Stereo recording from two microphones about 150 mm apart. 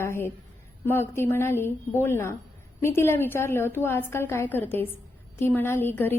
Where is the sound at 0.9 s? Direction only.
15° left (ahead or behind).